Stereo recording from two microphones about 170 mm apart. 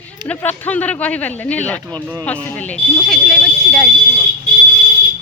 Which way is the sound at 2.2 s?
10° left (ahead or behind).